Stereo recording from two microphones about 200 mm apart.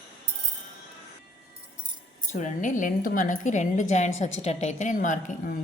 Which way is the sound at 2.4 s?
40° left (ahead or behind).